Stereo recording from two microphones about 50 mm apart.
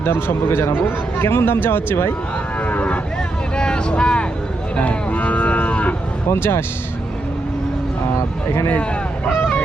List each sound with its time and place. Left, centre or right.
0.0 s speech: left
2.6 s cattle: left
3.5 s vehicle: centre
4.8 s moo: left
6.3 s speech: left
8.7 s fowl: left